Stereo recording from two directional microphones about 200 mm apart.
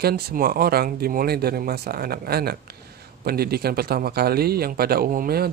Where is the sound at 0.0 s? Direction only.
50° right (ahead or behind).